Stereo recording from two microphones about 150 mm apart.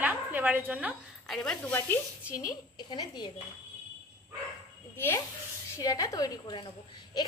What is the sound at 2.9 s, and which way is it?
Speech, 30° left (ahead or behind).